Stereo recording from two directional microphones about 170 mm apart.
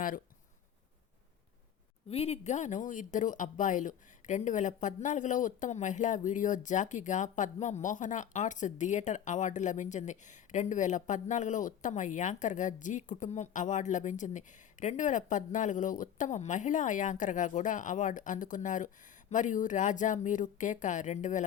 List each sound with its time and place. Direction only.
2.0 s speech: 35° left (ahead or behind)